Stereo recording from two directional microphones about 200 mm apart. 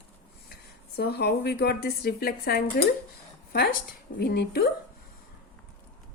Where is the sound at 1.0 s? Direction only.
55° left (ahead or behind).